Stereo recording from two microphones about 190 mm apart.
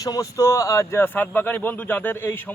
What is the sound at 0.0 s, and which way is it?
A man's voice, 20° left (ahead or behind).